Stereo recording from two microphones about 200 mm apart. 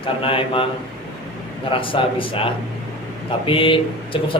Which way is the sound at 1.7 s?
25° left (ahead or behind).